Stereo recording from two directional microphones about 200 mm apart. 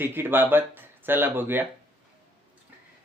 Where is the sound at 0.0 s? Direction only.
10° right (ahead or behind).